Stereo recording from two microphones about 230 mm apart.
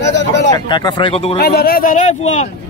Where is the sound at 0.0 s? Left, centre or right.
Left.